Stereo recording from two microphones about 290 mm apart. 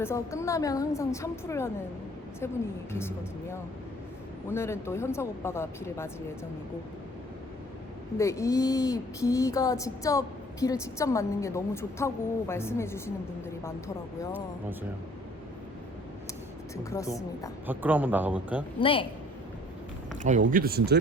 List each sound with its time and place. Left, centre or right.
0.0 s speech: centre
2.9 s speech: centre
8.2 s speech: centre
16.9 s speech: centre
17.7 s a man's voice: centre
18.8 s speech: centre
20.4 s speech: right